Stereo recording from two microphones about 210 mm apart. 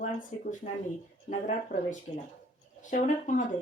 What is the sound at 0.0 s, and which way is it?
Speech, 35° left (ahead or behind).